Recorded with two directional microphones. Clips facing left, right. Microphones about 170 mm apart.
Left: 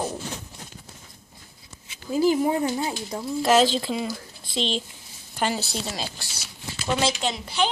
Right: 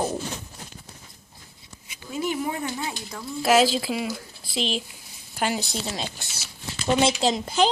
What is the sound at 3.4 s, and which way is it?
A woman's voice, 5° right (ahead or behind).